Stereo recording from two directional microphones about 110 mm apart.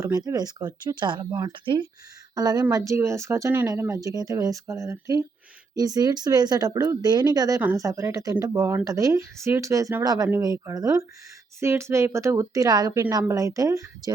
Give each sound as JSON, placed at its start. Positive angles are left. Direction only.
{"t": 0.0, "sound": "a woman's voice", "side_deg": -30}